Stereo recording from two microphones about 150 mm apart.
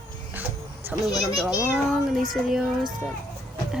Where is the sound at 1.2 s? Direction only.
Centre (ahead or behind).